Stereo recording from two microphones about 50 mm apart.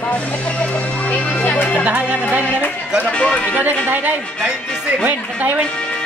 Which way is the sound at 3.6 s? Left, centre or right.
Right.